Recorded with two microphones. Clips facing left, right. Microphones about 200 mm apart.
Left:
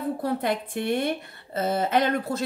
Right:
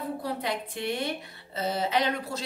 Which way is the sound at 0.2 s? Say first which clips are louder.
Left 5 dB; 50° left (ahead or behind).